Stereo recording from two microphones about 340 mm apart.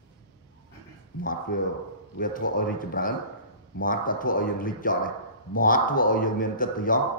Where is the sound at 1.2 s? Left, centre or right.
Left.